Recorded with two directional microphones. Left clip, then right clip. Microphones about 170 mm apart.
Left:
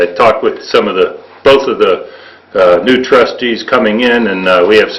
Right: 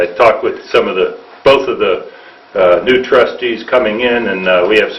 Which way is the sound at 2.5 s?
30° left (ahead or behind).